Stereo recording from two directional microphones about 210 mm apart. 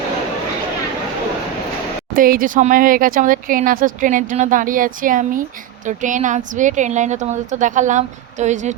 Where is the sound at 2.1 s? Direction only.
40° right (ahead or behind).